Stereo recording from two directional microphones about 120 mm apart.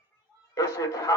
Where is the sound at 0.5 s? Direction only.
25° left (ahead or behind).